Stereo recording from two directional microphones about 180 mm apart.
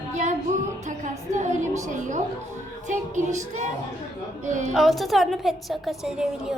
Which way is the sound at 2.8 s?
40° right (ahead or behind).